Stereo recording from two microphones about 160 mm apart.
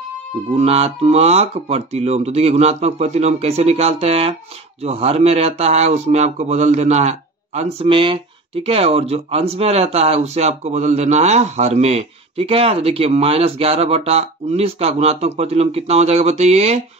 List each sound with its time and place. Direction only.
0.6 s speech: 40° right (ahead or behind)